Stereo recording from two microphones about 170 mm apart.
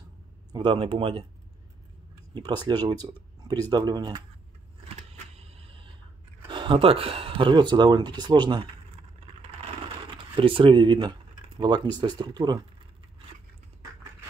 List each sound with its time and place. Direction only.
0.5 s speech: 30° right (ahead or behind)
2.3 s speech: 25° right (ahead or behind)
5.1 s a sound: 35° right (ahead or behind)
6.4 s speech: 30° right (ahead or behind)
10.3 s speech: 30° right (ahead or behind)